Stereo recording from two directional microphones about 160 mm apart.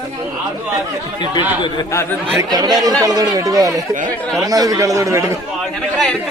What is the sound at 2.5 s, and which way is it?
A man's voice, 25° right (ahead or behind).